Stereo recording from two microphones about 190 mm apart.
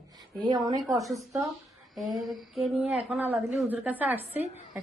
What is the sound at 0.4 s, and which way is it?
Speech, 20° right (ahead or behind).